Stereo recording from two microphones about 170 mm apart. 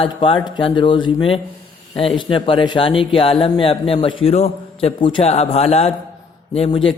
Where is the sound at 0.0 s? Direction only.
30° left (ahead or behind).